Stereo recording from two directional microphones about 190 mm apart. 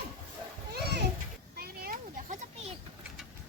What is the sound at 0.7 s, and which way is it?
Children playing, 60° right (ahead or behind).